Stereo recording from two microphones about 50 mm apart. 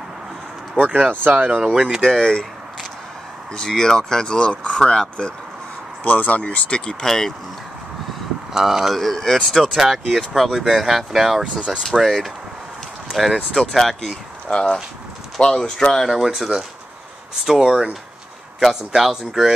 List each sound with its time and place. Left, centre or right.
0.7 s speech: right
2.2 s a sound: centre
3.5 s speech: centre
6.0 s speech: left; by 7.3 s centre
8.5 s speech: centre
11.5 s speech: centre
11.8 s speech: centre
13.5 s speech: centre
14.5 s speech: centre
16.1 s speech: centre